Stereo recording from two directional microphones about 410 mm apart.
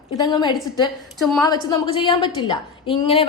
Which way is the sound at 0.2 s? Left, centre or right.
Centre.